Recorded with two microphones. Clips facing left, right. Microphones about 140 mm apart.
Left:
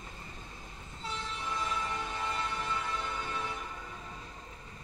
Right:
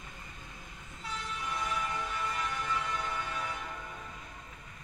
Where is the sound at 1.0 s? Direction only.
30° left (ahead or behind).